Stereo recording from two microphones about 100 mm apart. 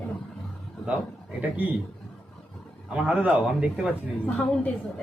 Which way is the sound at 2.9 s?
10° right (ahead or behind).